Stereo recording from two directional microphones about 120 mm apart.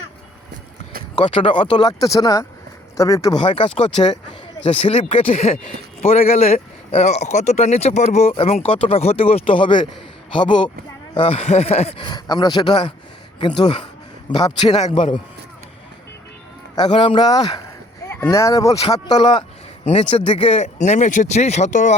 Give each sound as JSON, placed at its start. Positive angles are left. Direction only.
{"t": 1.2, "sound": "speech", "side_deg": 45}
{"t": 1.9, "sound": "speech", "side_deg": 30}
{"t": 3.4, "sound": "speech", "side_deg": 45}
{"t": 3.8, "sound": "speech", "side_deg": 70}
{"t": 4.6, "sound": "speech", "side_deg": 55}
{"t": 5.1, "sound": "a sound", "side_deg": 55}
{"t": 6.0, "sound": "speech", "side_deg": 65}
{"t": 8.6, "sound": "speech", "side_deg": 50}
{"t": 11.4, "sound": "a sound", "side_deg": 60}
{"t": 11.9, "sound": "speech", "side_deg": 35}
{"t": 16.7, "sound": "speech", "side_deg": 40}
{"t": 19.9, "sound": "speech", "side_deg": 50}
{"t": 20.6, "sound": "speech", "side_deg": 75}